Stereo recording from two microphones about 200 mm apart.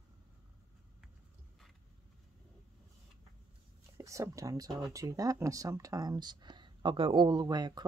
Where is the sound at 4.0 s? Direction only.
15° right (ahead or behind).